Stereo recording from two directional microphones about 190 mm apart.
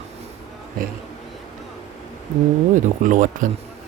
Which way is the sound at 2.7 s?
45° right (ahead or behind).